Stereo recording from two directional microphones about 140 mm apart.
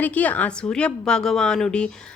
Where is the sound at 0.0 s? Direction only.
10° left (ahead or behind).